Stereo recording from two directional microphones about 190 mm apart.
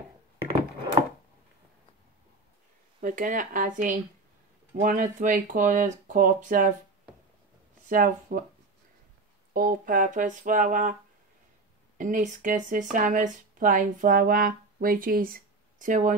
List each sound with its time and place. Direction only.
3.0 s speech: 45° right (ahead or behind)
7.9 s speech: 45° right (ahead or behind)
9.5 s speech: 45° right (ahead or behind)
12.0 s speech: 45° right (ahead or behind)